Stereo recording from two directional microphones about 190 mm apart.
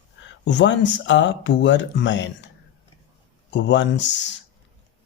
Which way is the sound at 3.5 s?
70° left (ahead or behind).